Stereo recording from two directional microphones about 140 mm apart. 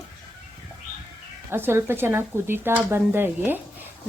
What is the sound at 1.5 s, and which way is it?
Speech, 15° right (ahead or behind).